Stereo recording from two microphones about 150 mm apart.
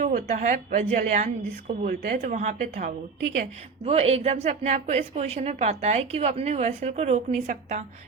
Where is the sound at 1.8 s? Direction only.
80° right.